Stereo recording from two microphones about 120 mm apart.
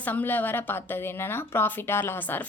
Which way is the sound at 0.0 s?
15° left (ahead or behind).